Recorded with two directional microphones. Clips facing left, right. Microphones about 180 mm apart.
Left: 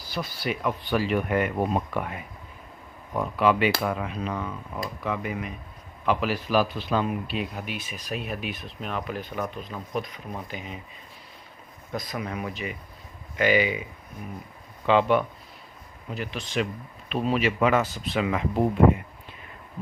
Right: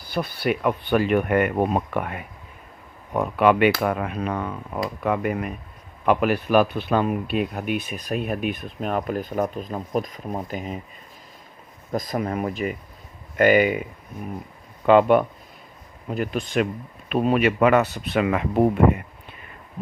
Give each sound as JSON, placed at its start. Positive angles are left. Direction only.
{"t": 0.1, "sound": "a man's voice", "side_deg": -60}
{"t": 11.9, "sound": "a man's voice", "side_deg": -45}
{"t": 14.8, "sound": "a man's voice", "side_deg": -50}